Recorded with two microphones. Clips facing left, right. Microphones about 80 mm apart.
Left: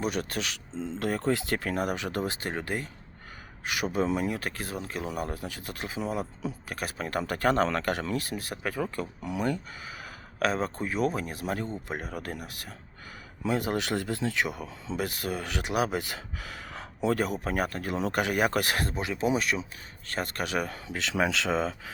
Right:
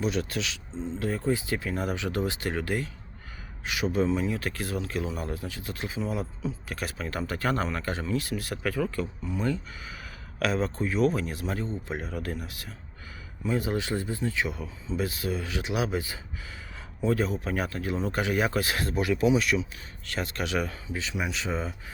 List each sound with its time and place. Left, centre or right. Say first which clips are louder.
0.0 s speech: right 1 dB; left
0.9 s speech: even; left
3.7 s speech: right 2 dB; left
6.1 s speech: even; left
6.7 s speech: even; left
7.7 s speech: left 1 dB; left
8.2 s speech: right 2 dB; left
9.2 s speech: left 2 dB; left
10.4 s speech: right 1 dB; left
11.5 s speech: right 1 dB; left
18.9 s speech: right 4 dB; left
19.3 s speech: right 3 dB; left
20.8 s speech: left 4 dB; left